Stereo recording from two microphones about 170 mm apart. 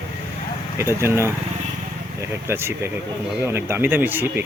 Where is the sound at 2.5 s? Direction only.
15° right (ahead or behind).